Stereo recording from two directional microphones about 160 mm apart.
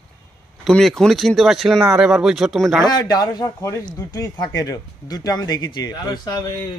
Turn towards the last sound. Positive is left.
turn(degrees=25)  # may be behind; listen again after turning